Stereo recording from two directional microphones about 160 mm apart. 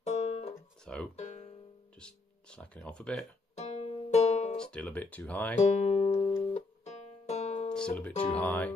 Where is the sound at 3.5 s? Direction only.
45° left (ahead or behind).